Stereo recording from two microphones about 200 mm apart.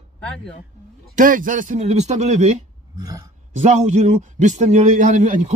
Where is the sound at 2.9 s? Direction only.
20° right (ahead or behind).